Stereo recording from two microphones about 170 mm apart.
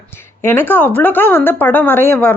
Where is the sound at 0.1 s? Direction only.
15° left (ahead or behind).